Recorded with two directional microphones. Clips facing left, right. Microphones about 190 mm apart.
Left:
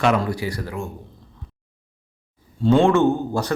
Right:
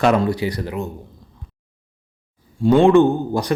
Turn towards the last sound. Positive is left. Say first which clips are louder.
# right 3 dB
turn(degrees=-15)  # may be behind; listen again after turning